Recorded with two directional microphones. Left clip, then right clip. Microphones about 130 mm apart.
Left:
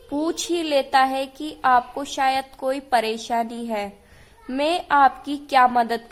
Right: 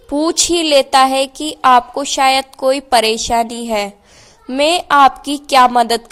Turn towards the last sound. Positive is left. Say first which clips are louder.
# right 7 dB
turn(degrees=-40)  # may be behind; listen again after turning